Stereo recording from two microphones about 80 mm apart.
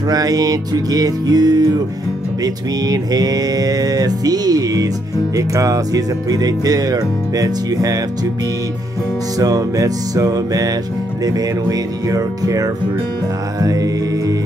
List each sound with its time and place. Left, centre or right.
0.1 s speech: right
9.4 s speech: right
12.1 s speech: right
13.6 s music: right